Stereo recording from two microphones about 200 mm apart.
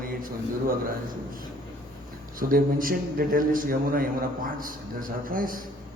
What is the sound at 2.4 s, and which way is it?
A man's voice, 45° right (ahead or behind).